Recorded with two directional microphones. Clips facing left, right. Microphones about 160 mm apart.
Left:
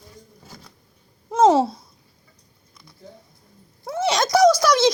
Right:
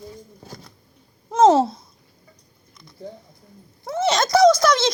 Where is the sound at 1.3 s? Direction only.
10° left (ahead or behind).